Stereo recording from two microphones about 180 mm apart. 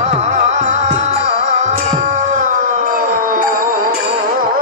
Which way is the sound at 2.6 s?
50° right (ahead or behind).